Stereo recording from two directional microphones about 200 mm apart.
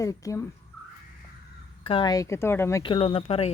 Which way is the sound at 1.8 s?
25° left (ahead or behind).